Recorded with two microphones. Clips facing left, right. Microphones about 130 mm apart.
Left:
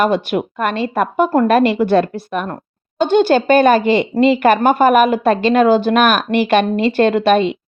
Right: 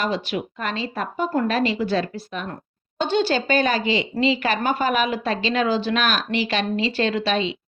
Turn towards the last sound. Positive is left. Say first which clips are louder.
# left 9 dB
turn(degrees=55)  # may be behind; listen again after turning